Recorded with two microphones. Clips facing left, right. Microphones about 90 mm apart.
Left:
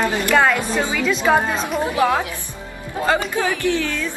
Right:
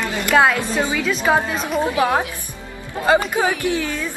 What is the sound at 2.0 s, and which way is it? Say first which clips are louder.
A woman's voice: even; 20° right (ahead or behind).